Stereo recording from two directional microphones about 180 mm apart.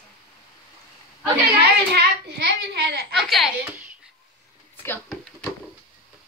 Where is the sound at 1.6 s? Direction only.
60° right (ahead or behind).